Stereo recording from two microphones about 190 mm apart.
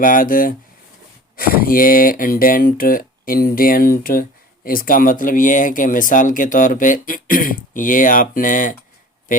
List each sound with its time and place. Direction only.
0.0 s speech: 45° left (ahead or behind)